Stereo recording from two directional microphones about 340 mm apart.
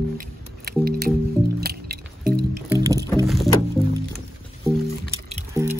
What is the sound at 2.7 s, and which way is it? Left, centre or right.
Music, centre.